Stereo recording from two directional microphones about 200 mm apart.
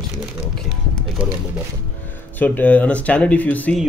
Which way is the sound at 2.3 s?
10° left (ahead or behind).